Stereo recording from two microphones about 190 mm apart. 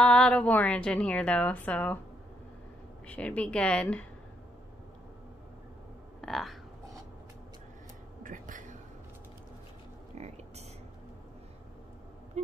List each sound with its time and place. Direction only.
0.0 s a woman's voice: 5° left (ahead or behind)
3.1 s a woman's voice: 5° left (ahead or behind)
6.2 s speech: centre (ahead or behind)
8.2 s a sound: 45° right (ahead or behind)